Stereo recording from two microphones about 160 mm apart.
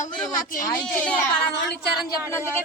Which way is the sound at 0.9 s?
10° left (ahead or behind).